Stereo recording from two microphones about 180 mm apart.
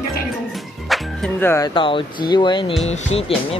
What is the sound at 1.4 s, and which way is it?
Speech, 15° left (ahead or behind).